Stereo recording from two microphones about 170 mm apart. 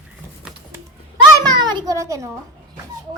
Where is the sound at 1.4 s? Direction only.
25° right (ahead or behind).